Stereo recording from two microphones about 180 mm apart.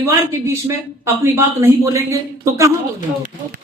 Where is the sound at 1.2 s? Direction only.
15° right (ahead or behind).